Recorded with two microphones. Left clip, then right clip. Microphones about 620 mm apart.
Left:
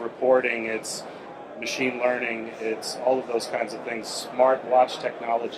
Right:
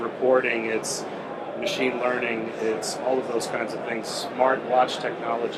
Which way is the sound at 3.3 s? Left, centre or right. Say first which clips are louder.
Even; left.